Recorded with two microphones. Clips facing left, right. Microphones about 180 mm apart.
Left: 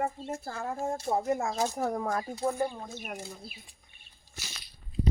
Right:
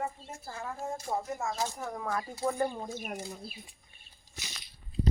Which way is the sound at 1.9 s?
40° left (ahead or behind).